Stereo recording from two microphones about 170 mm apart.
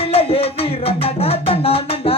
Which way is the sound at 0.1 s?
35° left (ahead or behind).